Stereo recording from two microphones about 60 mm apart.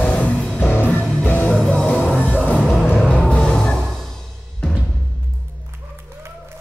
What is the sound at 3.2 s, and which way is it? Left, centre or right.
Music, centre.